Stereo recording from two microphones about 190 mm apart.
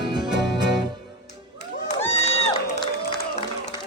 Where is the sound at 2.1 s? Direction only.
30° left (ahead or behind).